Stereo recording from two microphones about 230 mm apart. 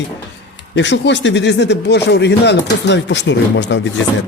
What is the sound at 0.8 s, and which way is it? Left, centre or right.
Speech, left.